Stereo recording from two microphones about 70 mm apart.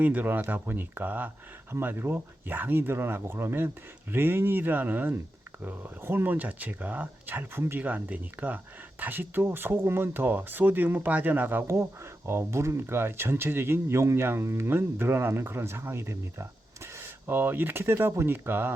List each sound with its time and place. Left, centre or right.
0.0 s speech: right
7.8 s speech: right
11.7 s speech: right